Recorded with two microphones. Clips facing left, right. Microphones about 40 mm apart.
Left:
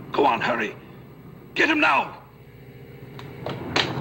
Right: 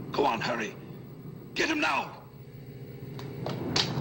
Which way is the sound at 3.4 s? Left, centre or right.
Left.